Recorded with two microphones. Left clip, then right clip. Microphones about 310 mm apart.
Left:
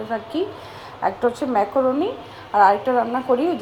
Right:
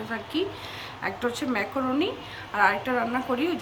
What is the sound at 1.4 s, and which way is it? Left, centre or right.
A woman's voice, centre.